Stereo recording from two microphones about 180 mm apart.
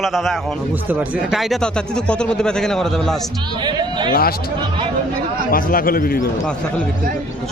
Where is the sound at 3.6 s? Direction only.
25° right (ahead or behind).